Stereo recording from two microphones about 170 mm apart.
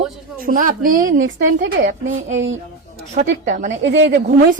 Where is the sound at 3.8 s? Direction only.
90° right.